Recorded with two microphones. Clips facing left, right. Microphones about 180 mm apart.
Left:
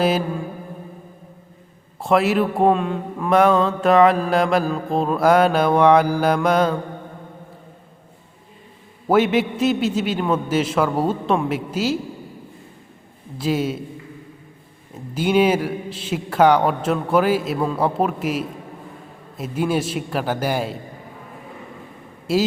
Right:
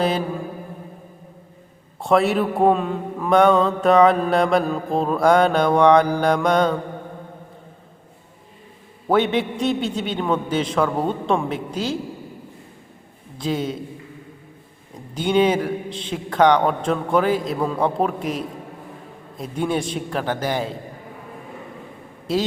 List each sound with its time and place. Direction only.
2.0 s a man's voice: centre (ahead or behind)
9.0 s a man's voice: 5° left (ahead or behind)
13.4 s a man's voice: 5° left (ahead or behind)
14.9 s a man's voice: 5° left (ahead or behind)
22.3 s a man's voice: 10° left (ahead or behind)